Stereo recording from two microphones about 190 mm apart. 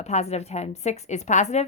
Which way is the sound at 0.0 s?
35° left (ahead or behind).